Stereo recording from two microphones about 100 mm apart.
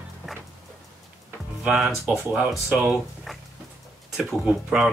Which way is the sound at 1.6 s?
5° right (ahead or behind).